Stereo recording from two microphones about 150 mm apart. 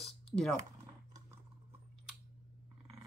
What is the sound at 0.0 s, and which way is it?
Typing, centre (ahead or behind).